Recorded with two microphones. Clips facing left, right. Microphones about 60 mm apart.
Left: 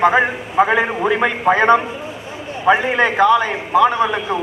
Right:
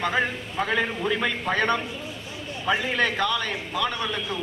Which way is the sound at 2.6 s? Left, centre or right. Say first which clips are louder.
Left 9 dB; left.